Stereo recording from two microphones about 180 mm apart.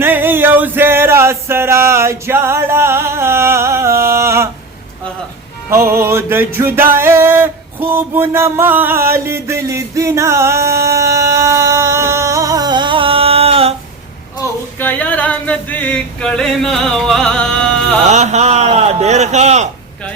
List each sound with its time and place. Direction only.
0.0 s music: 10° right (ahead or behind)
5.7 s music: 15° right (ahead or behind); by 13.7 s 35° right (ahead or behind)
14.4 s a sound: 15° left (ahead or behind)
14.8 s male singing: 10° left (ahead or behind)
18.1 s a man's voice: 40° right (ahead or behind)